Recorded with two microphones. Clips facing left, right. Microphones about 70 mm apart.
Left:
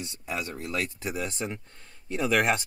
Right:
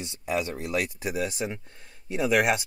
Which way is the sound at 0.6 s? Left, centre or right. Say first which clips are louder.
Right 3 dB; centre.